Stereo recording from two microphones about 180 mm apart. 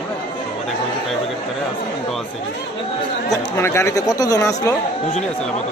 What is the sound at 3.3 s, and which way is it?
Speech, 15° left (ahead or behind).